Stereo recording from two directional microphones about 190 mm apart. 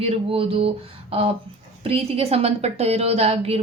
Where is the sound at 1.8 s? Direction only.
30° right (ahead or behind).